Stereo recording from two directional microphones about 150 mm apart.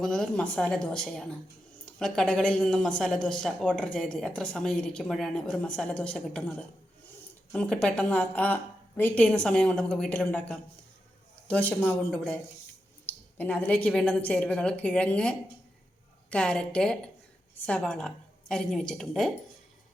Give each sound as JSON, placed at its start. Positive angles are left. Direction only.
{"t": 0.0, "sound": "a woman's voice", "side_deg": 5}